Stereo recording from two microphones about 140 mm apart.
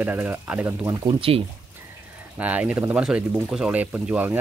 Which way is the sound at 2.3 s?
10° right (ahead or behind).